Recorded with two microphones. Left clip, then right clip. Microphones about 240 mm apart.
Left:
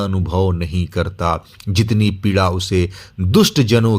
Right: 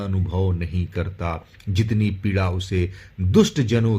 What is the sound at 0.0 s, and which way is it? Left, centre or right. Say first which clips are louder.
Speech: left 8 dB; left.